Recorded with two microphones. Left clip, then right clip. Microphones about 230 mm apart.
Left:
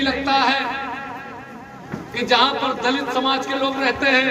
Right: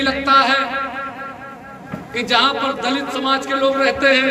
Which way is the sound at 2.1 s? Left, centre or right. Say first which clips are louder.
Right 1 dB; right.